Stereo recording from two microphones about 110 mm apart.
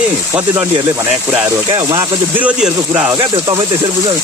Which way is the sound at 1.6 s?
40° right (ahead or behind).